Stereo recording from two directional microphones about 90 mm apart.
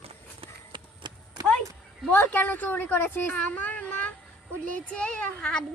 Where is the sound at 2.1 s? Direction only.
20° left (ahead or behind).